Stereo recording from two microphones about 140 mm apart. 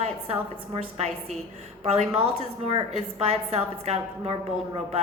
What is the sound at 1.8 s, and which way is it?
A woman's voice, 50° right (ahead or behind).